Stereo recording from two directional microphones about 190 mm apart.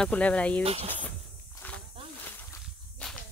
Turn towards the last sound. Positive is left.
turn(degrees=5)  # may be behind; listen again after turning